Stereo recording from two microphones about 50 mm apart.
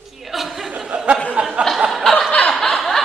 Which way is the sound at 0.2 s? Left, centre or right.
Centre.